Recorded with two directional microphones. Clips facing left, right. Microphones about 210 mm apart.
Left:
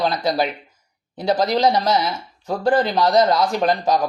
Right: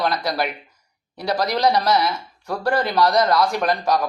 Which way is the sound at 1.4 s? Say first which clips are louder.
Even; 25° left (ahead or behind).